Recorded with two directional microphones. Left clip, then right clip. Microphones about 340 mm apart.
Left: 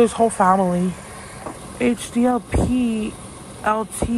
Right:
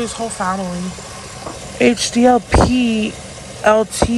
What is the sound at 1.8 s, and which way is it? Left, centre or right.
Speech, right.